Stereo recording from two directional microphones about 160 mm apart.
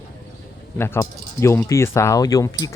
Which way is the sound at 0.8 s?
15° left (ahead or behind).